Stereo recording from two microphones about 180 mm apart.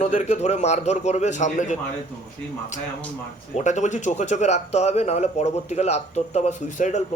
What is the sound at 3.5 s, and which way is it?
Speech, 40° left (ahead or behind).